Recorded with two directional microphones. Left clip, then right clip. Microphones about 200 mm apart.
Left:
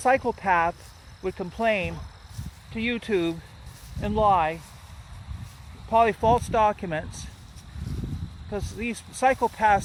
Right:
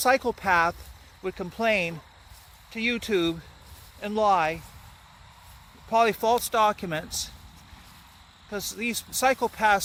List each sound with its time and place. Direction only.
0.0 s speech: 15° right (ahead or behind)
5.9 s speech: 15° right (ahead or behind)
8.4 s speech: 15° right (ahead or behind)